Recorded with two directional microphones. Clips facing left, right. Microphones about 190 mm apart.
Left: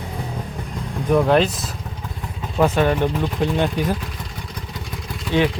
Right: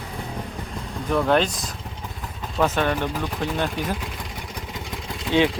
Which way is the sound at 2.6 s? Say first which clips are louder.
Left 4 dB; 10° left (ahead or behind).